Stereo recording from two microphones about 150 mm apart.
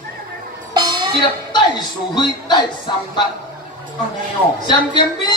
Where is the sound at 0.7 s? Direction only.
30° right (ahead or behind).